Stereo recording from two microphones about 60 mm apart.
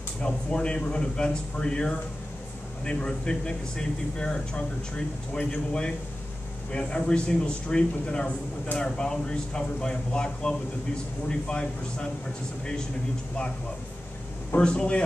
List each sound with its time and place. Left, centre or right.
0.2 s speech: centre
14.6 s speech: centre